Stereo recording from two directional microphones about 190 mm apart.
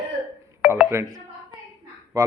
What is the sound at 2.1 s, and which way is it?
Speech, 20° right (ahead or behind).